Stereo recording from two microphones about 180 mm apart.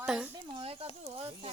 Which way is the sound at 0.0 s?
Centre (ahead or behind).